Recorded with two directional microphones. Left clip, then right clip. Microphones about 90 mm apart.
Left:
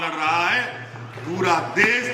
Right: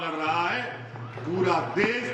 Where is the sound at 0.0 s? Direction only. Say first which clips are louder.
Left 5 dB; 50° left (ahead or behind).